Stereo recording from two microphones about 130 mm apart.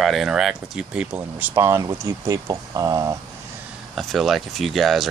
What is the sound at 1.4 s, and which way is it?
Speech, 20° right (ahead or behind).